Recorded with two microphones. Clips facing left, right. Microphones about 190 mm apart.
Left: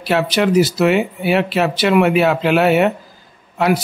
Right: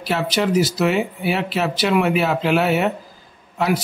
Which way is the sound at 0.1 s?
65° left (ahead or behind).